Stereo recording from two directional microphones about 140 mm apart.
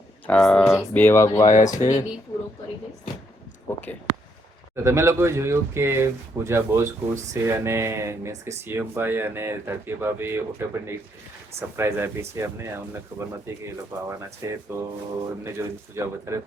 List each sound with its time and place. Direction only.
0.3 s speech: 5° left (ahead or behind)
0.9 s speech: 15° left (ahead or behind)
1.5 s speech: 60° left (ahead or behind)
3.7 s a sound: 15° left (ahead or behind)
4.8 s speech: 20° right (ahead or behind)
11.8 s speech: 15° right (ahead or behind)